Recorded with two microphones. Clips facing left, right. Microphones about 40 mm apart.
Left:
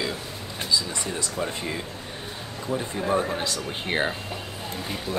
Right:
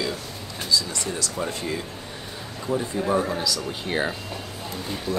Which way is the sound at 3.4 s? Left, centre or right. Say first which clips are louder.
Right 1 dB; left.